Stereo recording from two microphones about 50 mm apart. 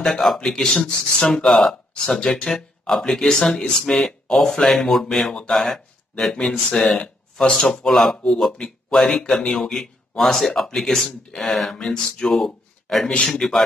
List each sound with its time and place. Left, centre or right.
0.0 s speech: centre
6.4 s speech: centre
7.0 s a sound: centre
7.6 s speech: centre
11.8 s speech: centre